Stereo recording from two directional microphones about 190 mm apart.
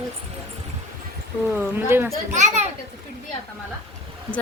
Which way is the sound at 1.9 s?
10° right (ahead or behind).